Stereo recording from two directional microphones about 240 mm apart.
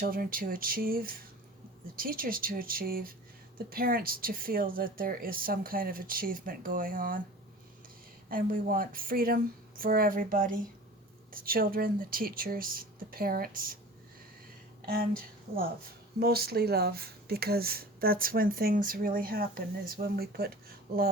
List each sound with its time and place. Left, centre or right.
0.0 s speech: right
8.3 s speech: right
14.8 s a woman's voice: right